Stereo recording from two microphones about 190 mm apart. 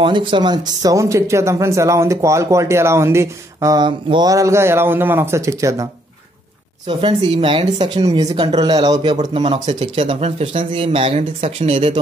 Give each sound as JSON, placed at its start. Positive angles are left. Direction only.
{"t": 0.0, "sound": "speech", "side_deg": -25}
{"t": 6.9, "sound": "speech", "side_deg": -30}